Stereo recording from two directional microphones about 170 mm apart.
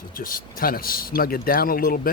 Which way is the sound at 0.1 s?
55° left (ahead or behind).